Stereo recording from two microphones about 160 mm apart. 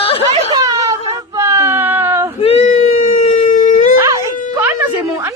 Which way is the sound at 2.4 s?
40° left (ahead or behind).